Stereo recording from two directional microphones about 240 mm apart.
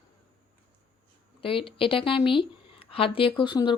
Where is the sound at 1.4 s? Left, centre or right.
Left.